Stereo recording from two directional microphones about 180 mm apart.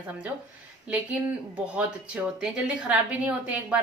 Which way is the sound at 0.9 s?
10° right (ahead or behind).